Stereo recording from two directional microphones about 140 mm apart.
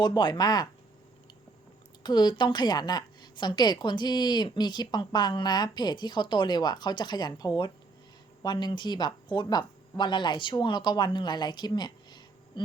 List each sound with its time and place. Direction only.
0.0 s speech: 30° left (ahead or behind)
2.0 s a woman's voice: 30° left (ahead or behind)